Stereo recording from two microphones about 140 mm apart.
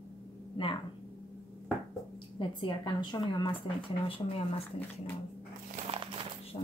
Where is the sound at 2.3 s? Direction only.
35° left (ahead or behind).